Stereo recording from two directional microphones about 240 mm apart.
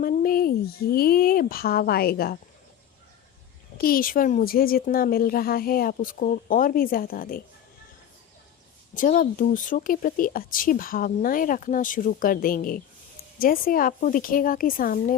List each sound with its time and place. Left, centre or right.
0.0 s speech: left
3.8 s speech: left
9.0 s speech: left